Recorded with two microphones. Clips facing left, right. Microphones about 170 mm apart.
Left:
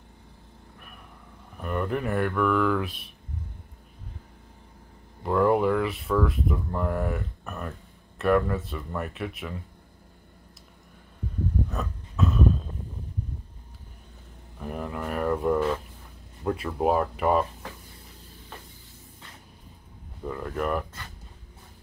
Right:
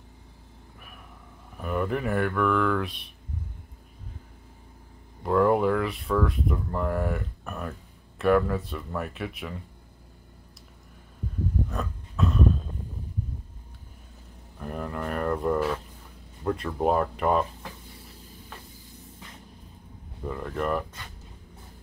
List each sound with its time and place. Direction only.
1.6 s speech: centre (ahead or behind)
5.2 s speech: centre (ahead or behind)
11.7 s a sound: centre (ahead or behind)
14.6 s a sound: centre (ahead or behind)
16.4 s speech: 5° left (ahead or behind)
20.2 s speech: centre (ahead or behind)